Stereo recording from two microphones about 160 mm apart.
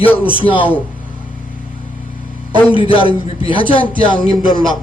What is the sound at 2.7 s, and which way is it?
A man's voice, 35° left (ahead or behind).